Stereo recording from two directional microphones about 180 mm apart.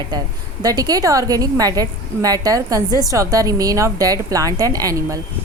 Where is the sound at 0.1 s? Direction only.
20° right (ahead or behind).